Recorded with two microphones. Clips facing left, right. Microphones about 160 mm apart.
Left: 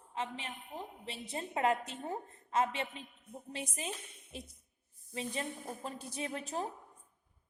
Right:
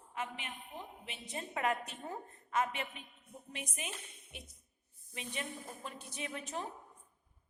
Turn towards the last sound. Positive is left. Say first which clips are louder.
# left 4 dB
turn(degrees=35)  # may be behind; listen again after turning